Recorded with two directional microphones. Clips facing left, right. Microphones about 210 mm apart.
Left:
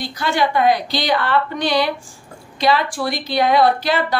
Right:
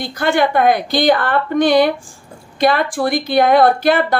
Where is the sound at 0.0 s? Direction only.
55° right (ahead or behind).